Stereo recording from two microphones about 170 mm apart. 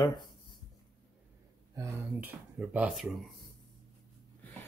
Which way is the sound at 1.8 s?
15° right (ahead or behind).